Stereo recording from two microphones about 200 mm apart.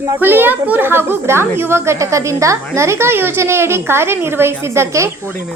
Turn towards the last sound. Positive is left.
turn(degrees=-15)  # may be behind; listen again after turning